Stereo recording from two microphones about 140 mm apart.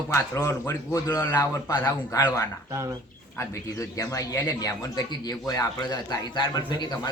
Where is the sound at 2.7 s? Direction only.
20° right (ahead or behind).